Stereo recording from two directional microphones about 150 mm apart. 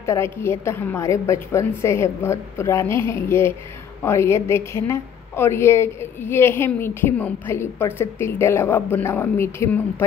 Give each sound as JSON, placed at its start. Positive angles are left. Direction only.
{"t": 0.0, "sound": "a woman's voice", "side_deg": 20}